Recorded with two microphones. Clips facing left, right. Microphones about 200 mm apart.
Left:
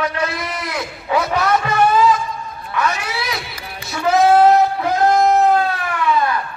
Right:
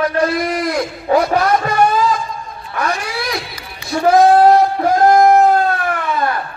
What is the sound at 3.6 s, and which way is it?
Music, 50° left (ahead or behind).